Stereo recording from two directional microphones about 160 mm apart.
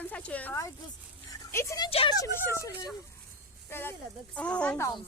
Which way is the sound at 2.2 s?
15° left (ahead or behind).